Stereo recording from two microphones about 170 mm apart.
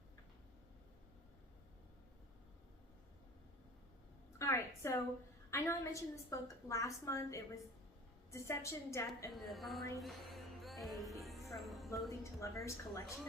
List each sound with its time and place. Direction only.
4.4 s a sound: 15° left (ahead or behind)
5.5 s a woman's voice: 15° left (ahead or behind)
9.3 s a woman's voice: centre (ahead or behind)
10.0 s music: centre (ahead or behind)
12.2 s a woman's voice: 15° left (ahead or behind)